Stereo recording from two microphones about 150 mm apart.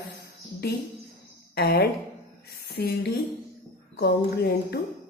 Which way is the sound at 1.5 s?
90° left.